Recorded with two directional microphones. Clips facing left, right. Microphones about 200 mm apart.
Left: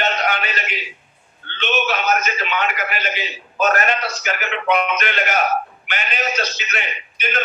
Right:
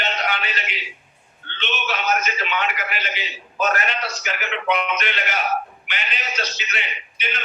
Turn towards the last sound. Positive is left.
turn(degrees=45)  # may be behind; listen again after turning